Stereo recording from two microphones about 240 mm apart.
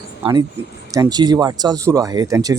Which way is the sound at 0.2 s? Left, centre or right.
Centre.